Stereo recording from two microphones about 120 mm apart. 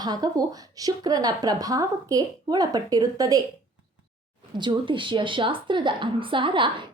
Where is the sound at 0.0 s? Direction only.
35° right (ahead or behind).